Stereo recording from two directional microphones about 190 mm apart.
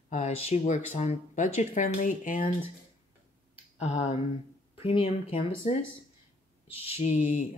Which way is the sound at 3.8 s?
35° left (ahead or behind).